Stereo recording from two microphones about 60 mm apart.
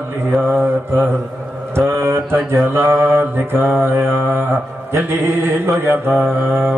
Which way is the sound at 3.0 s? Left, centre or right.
Right.